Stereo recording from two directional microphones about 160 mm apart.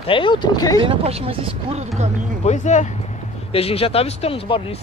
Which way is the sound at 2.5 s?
45° left (ahead or behind).